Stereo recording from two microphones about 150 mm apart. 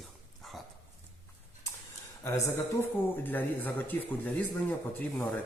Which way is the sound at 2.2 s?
15° left (ahead or behind).